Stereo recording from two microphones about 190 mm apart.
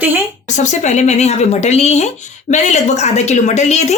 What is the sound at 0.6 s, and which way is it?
Speech, 40° left (ahead or behind).